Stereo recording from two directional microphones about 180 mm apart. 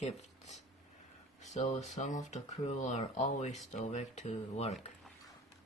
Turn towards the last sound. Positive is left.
turn(degrees=35)  # may be behind; listen again after turning